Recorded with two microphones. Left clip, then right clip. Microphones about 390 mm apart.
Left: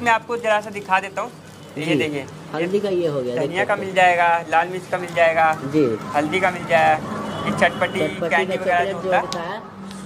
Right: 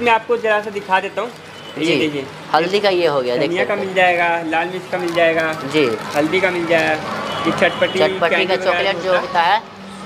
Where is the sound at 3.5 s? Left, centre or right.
Left.